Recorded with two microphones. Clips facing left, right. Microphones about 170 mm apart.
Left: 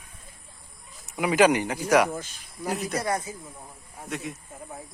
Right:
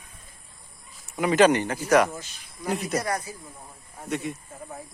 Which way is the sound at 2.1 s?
50° left (ahead or behind).